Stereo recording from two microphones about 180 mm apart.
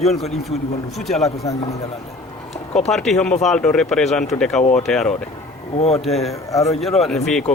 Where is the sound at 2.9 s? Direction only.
Centre (ahead or behind).